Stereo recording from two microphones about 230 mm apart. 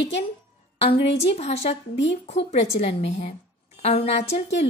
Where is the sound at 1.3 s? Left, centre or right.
Left.